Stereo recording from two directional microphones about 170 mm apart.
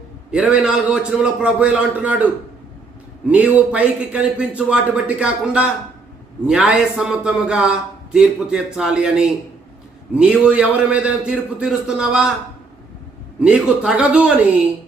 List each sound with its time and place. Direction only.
0.3 s a man's voice: 5° right (ahead or behind)
13.4 s a man's voice: 5° right (ahead or behind)